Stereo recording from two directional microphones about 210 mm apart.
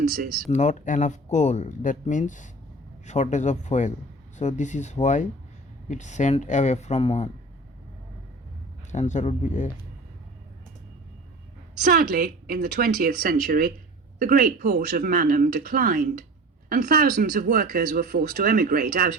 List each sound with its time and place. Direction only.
0.0 s speech: 50° right (ahead or behind)
0.4 s speech: 35° left (ahead or behind)
8.9 s speech: 35° left (ahead or behind)
11.8 s speech: 45° right (ahead or behind)